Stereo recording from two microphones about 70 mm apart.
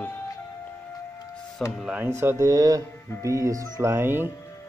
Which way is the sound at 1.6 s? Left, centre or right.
Centre.